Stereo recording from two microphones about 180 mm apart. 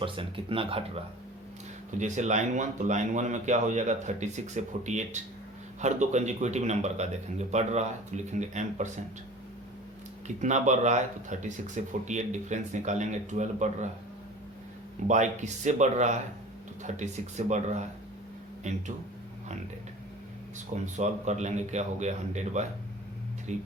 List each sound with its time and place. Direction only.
0.0 s speech: 30° right (ahead or behind)
1.9 s speech: 40° right (ahead or behind)
10.2 s speech: 40° right (ahead or behind)
15.0 s speech: 40° right (ahead or behind)
20.8 s speech: 40° right (ahead or behind)